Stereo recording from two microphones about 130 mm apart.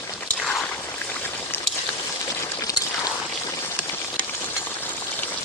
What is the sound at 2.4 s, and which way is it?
Pour, 25° left (ahead or behind).